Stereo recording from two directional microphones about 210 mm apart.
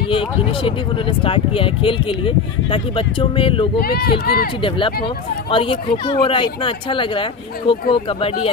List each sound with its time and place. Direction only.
0.1 s speech: 25° left (ahead or behind)
3.8 s speech: 50° left (ahead or behind)
4.6 s speech: 25° left (ahead or behind)